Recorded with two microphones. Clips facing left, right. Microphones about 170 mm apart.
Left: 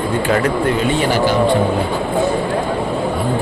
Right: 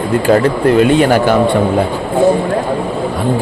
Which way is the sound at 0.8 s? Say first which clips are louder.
Right 6 dB; 60° right (ahead or behind).